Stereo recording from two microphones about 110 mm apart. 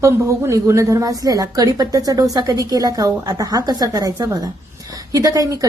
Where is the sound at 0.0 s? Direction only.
30° right (ahead or behind).